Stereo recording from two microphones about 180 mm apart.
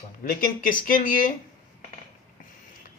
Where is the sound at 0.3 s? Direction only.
50° left (ahead or behind).